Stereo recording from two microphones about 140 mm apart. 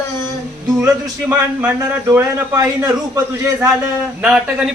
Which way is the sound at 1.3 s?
25° right (ahead or behind).